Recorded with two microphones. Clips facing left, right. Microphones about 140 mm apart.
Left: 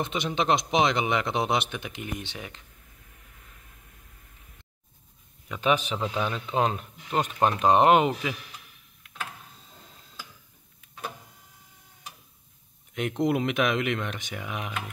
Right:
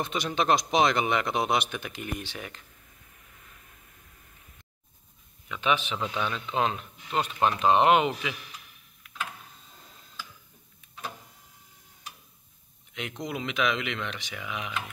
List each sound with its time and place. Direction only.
0.0 s a man's voice: 25° left (ahead or behind)
5.5 s speech: 40° left (ahead or behind)
13.2 s speech: 55° left (ahead or behind)